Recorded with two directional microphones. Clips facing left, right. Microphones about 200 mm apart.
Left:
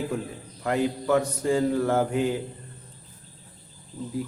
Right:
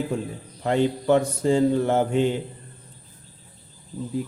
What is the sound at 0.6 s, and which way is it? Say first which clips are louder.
Mantra: right 3 dB; 25° right (ahead or behind).